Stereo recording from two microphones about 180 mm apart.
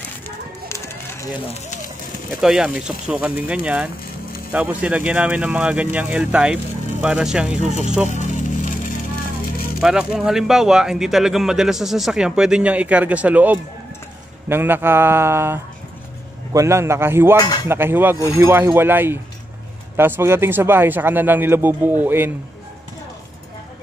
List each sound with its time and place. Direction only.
0.7 s a sound: 15° left (ahead or behind)
2.4 s speech: 5° right (ahead or behind)
8.1 s music: 40° left (ahead or behind)
9.8 s speech: 5° right (ahead or behind)
17.4 s speech: 20° left (ahead or behind)
17.6 s speech: 10° right (ahead or behind)